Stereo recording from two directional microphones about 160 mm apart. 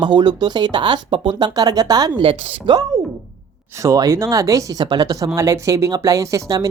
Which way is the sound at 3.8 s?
20° right (ahead or behind).